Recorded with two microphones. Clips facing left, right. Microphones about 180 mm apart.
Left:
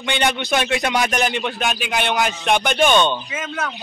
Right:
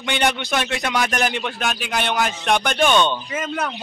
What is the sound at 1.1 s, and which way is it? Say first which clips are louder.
Speech: left 2 dB; 5° right (ahead or behind).